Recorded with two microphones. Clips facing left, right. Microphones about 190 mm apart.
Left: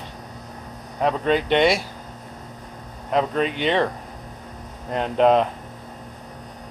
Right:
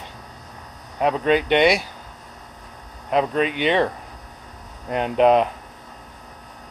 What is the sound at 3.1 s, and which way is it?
Speech, 10° right (ahead or behind).